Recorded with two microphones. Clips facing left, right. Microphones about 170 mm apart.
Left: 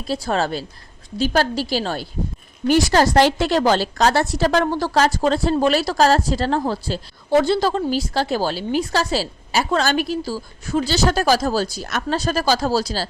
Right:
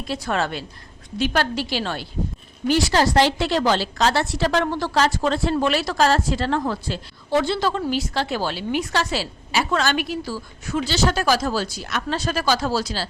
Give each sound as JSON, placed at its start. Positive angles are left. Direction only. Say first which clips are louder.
{"t": 0.0, "sound": "a woman's voice", "louder": "left 3 dB", "side_deg": 35}